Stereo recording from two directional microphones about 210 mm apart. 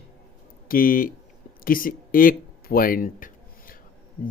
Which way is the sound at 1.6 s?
40° left (ahead or behind).